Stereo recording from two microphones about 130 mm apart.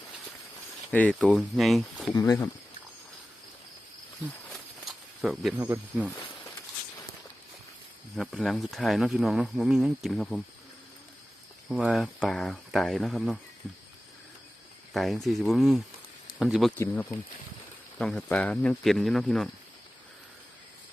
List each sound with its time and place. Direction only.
0.9 s speech: 10° left (ahead or behind)
2.1 s speech: 25° left (ahead or behind)
4.5 s a sound: centre (ahead or behind)
5.5 s speech: 20° right (ahead or behind)
8.1 s speech: 5° left (ahead or behind)
11.7 s speech: 5° right (ahead or behind)
14.9 s speech: centre (ahead or behind)
16.7 s speech: 15° left (ahead or behind)
17.9 s speech: 5° left (ahead or behind)